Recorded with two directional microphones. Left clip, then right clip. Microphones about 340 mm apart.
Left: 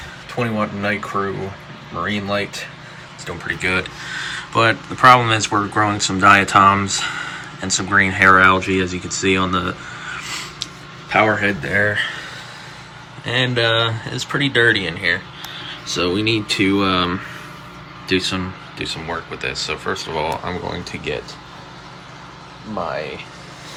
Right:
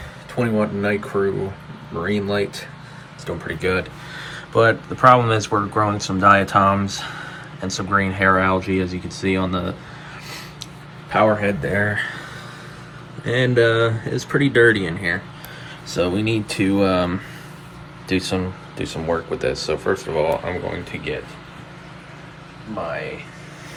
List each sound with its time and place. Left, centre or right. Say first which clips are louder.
0.3 s speech: right 1 dB; centre
11.1 s speech: left 1 dB; centre
13.2 s speech: right 1 dB; centre